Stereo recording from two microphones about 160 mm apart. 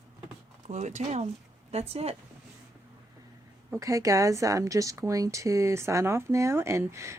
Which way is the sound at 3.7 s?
20° right (ahead or behind).